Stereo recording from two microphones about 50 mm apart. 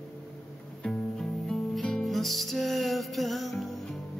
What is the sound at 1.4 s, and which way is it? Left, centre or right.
Music, centre.